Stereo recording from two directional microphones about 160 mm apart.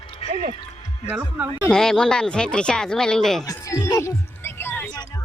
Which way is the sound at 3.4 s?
20° left (ahead or behind).